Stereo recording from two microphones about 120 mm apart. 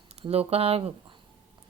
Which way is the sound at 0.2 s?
55° right (ahead or behind).